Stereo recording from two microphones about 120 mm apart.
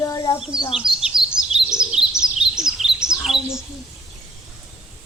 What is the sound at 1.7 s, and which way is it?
Chirp, 5° right (ahead or behind).